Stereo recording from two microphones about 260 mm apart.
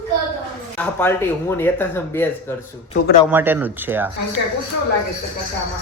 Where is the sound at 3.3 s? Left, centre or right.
Centre.